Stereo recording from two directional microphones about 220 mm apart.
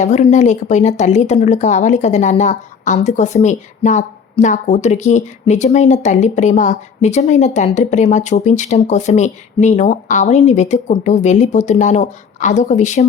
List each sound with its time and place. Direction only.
0.0 s speech: 30° left (ahead or behind)